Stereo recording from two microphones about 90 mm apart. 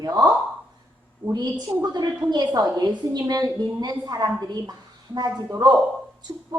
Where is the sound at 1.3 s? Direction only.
50° right (ahead or behind).